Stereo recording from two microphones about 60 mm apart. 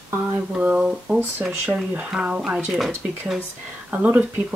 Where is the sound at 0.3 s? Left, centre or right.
Right.